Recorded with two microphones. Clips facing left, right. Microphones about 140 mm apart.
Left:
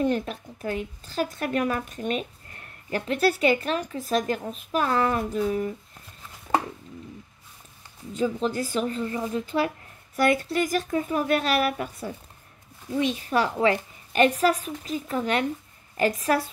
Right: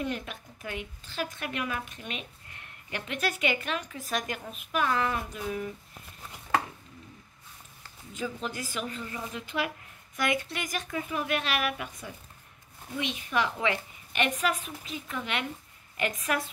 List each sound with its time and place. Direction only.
0.0 s speech: 35° left (ahead or behind)
8.2 s speech: 30° left (ahead or behind)